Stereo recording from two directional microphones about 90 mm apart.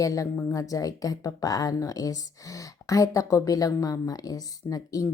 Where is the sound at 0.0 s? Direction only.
40° left (ahead or behind).